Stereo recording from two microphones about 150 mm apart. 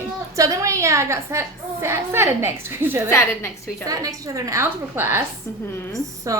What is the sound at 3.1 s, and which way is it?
Speech, 15° left (ahead or behind).